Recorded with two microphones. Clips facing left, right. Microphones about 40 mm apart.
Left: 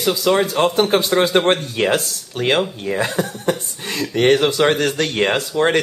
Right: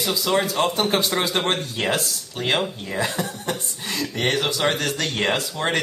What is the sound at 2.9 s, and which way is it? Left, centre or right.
A man's voice, left.